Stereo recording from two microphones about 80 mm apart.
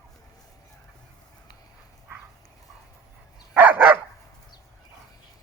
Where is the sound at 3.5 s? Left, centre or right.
Centre.